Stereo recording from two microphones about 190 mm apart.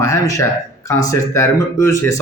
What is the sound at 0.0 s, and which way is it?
A man's voice, 15° left (ahead or behind).